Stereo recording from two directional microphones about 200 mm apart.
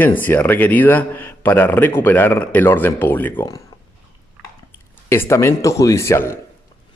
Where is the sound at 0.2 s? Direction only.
10° left (ahead or behind).